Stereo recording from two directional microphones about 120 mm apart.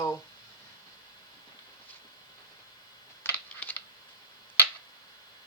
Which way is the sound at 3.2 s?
15° left (ahead or behind).